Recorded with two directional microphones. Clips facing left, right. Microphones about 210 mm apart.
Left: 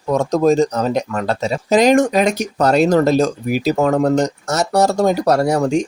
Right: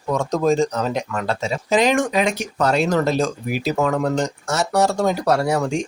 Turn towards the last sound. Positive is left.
turn(degrees=40)  # may be behind; listen again after turning